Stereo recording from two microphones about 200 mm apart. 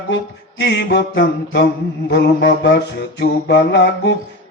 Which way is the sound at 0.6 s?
60° left (ahead or behind).